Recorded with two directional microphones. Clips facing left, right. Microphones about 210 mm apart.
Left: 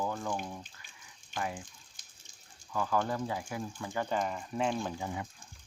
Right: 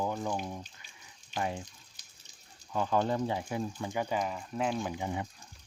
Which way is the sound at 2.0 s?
50° left (ahead or behind).